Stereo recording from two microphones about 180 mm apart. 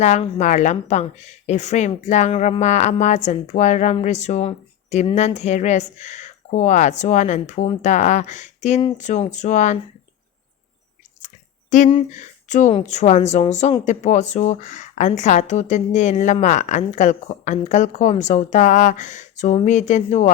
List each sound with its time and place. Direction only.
0.0 s a woman's voice: 40° left (ahead or behind)
11.7 s a woman's voice: 45° left (ahead or behind)